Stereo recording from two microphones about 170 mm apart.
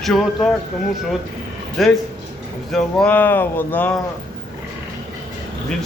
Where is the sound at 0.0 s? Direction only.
Centre (ahead or behind).